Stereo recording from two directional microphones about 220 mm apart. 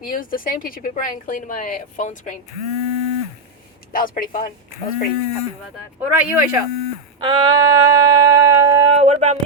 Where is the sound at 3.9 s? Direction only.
40° left (ahead or behind).